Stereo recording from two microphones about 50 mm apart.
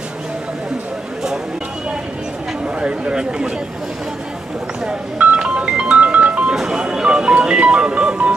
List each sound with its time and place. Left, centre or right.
2.6 s chatter: centre
5.4 s music: right
6.5 s music: centre